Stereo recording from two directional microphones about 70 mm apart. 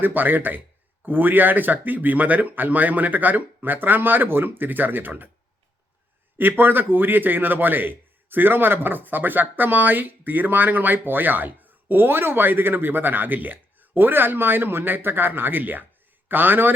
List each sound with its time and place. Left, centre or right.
0.0 s a man's voice: right
6.3 s a man's voice: right